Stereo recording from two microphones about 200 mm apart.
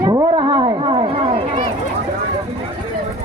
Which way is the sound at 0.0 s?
20° right (ahead or behind).